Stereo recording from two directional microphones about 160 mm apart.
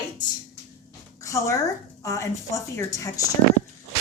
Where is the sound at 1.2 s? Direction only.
20° left (ahead or behind).